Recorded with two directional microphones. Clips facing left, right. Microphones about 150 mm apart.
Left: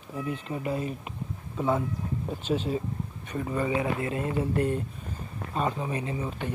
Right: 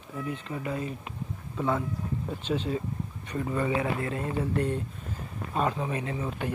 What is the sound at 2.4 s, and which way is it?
Speech, 5° left (ahead or behind).